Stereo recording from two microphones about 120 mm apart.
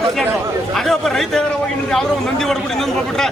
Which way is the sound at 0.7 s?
Centre (ahead or behind).